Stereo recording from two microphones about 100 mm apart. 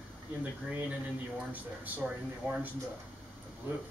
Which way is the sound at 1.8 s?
15° right (ahead or behind).